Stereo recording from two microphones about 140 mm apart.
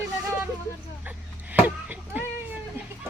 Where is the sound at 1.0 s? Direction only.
10° right (ahead or behind).